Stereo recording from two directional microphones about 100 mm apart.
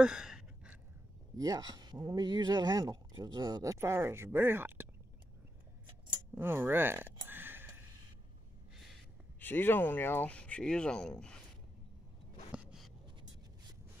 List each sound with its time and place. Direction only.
0.0 s a sound: 5° right (ahead or behind)
1.3 s speech: 40° right (ahead or behind); by 4.8 s 20° right (ahead or behind)
6.3 s speech: 20° right (ahead or behind)
7.2 s sniff: 20° right (ahead or behind)
9.4 s speech: 20° left (ahead or behind)